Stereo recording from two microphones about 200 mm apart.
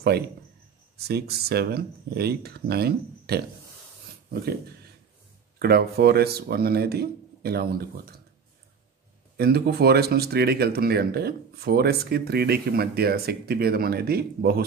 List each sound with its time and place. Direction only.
0.9 s speech: 55° right (ahead or behind)
5.6 s speech: 50° right (ahead or behind)
9.4 s speech: 50° right (ahead or behind)